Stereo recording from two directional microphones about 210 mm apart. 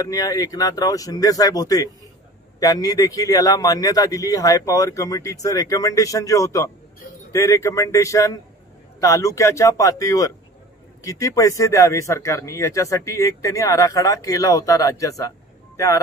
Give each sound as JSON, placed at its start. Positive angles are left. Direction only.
{"t": 0.0, "sound": "a man's voice", "side_deg": 15}